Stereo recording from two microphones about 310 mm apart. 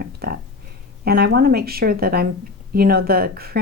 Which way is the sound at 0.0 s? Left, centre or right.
Right.